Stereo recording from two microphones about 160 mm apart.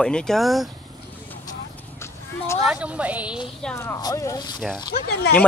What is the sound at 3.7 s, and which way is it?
Speech, 15° left (ahead or behind).